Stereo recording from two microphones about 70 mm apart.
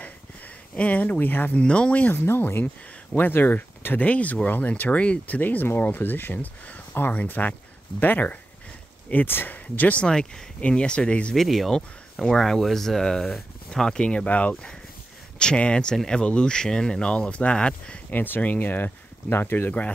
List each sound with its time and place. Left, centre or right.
0.7 s speech: left
1.6 s speech: centre
2.1 s speech: left
10.0 s speech: centre
11.3 s speech: centre
18.1 s speech: left